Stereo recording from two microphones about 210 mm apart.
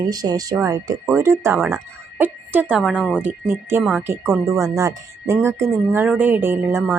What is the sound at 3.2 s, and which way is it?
A woman's voice, 10° right (ahead or behind).